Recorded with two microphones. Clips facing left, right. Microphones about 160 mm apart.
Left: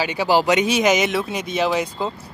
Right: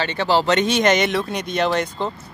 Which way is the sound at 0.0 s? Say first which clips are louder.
Left 1 dB; 10° left (ahead or behind).